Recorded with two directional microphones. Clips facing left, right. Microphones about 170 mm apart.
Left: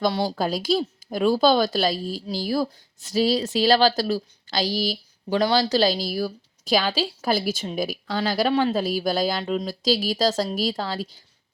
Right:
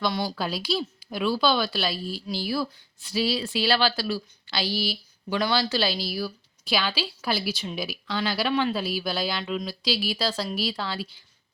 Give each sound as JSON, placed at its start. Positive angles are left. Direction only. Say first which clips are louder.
{"t": 0.0, "sound": "speech", "louder": "left 4 dB", "side_deg": 40}